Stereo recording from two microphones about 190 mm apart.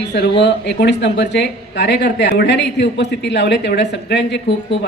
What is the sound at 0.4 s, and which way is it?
Speech, 65° left (ahead or behind).